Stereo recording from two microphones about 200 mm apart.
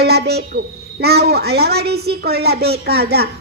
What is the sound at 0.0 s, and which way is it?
A woman's voice, 55° right (ahead or behind).